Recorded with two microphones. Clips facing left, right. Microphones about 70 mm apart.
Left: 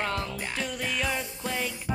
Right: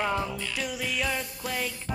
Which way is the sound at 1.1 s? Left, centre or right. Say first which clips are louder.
Even; centre.